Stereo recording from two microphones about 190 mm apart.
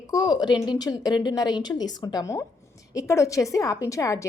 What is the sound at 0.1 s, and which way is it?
A woman's voice, 20° left (ahead or behind).